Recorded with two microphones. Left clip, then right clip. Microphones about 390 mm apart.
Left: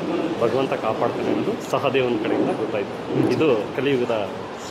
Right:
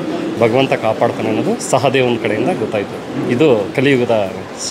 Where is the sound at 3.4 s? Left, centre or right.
Right.